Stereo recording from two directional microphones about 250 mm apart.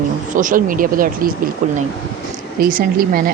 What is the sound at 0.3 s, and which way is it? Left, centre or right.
Speech, right.